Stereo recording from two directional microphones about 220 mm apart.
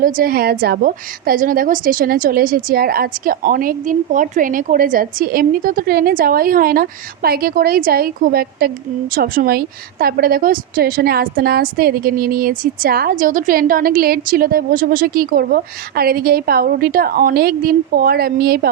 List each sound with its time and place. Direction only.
0.0 s a woman's voice: 40° right (ahead or behind)